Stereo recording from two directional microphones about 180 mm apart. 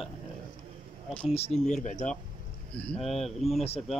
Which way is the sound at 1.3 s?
35° left (ahead or behind).